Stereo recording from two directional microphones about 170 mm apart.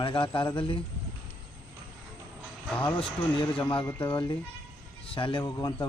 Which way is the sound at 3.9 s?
25° left (ahead or behind).